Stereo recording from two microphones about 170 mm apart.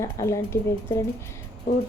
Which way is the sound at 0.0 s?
15° left (ahead or behind).